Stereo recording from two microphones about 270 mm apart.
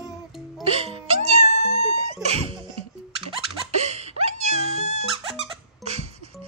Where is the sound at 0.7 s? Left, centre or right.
Right.